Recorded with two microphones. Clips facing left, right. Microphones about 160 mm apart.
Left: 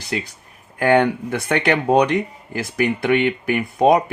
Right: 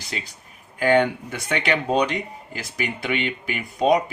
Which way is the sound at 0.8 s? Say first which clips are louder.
Left 3 dB; 55° left (ahead or behind).